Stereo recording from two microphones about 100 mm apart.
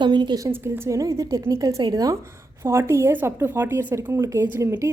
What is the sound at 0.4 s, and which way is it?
A woman's voice, 30° right (ahead or behind).